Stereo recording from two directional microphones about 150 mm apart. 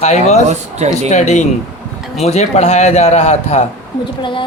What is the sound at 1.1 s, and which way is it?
A man's voice, 50° left (ahead or behind).